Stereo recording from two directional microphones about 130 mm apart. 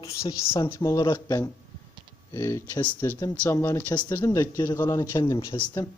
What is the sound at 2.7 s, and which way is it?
Speech, 15° left (ahead or behind).